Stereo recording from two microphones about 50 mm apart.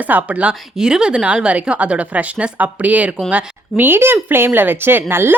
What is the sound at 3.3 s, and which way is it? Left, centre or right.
Speech, right.